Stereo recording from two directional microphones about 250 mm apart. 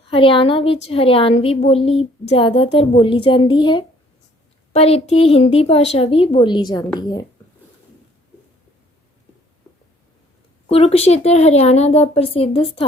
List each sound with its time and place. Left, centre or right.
0.1 s a woman's voice: left
10.7 s a woman's voice: left